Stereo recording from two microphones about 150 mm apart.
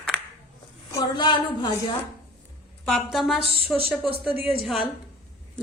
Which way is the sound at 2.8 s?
Centre (ahead or behind).